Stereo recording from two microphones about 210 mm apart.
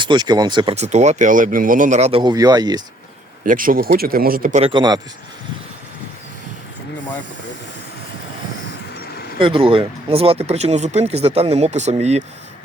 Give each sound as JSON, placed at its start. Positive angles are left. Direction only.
{"t": 0.0, "sound": "speech", "side_deg": -20}
{"t": 3.4, "sound": "speech", "side_deg": -40}
{"t": 4.7, "sound": "speech", "side_deg": -20}
{"t": 9.4, "sound": "speech", "side_deg": -25}